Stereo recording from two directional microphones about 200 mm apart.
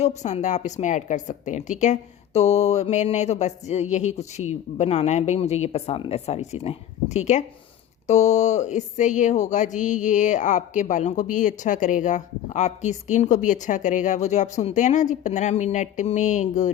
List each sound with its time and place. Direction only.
0.0 s speech: 35° left (ahead or behind)